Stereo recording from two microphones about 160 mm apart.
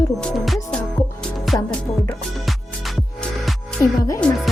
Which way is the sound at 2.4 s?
Centre (ahead or behind).